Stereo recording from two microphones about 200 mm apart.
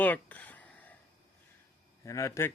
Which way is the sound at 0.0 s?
10° left (ahead or behind).